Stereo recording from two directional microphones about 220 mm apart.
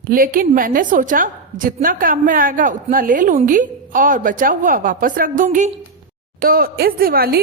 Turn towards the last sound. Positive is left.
turn(degrees=-40)  # may be behind; listen again after turning